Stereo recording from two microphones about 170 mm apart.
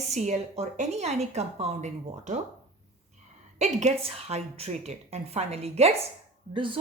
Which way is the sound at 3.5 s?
45° right (ahead or behind).